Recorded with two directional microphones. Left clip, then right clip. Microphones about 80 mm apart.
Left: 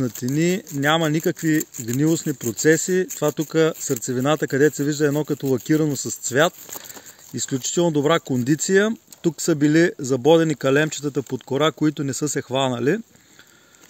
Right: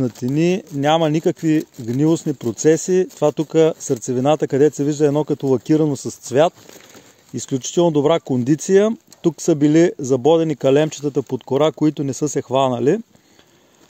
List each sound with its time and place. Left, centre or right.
0.0 s speech: right